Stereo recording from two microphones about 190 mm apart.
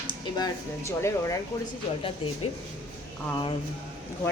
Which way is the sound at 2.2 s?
25° left (ahead or behind).